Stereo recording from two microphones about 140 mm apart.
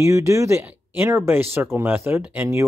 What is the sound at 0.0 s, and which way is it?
Speech, 20° right (ahead or behind).